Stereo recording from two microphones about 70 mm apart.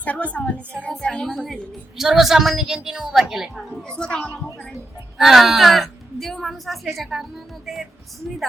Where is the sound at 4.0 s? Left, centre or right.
Centre.